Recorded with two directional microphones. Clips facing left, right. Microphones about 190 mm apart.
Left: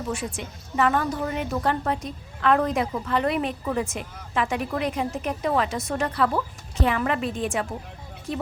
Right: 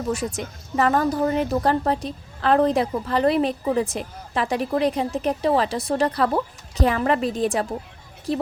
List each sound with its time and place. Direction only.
0.1 s a woman's voice: 40° right (ahead or behind)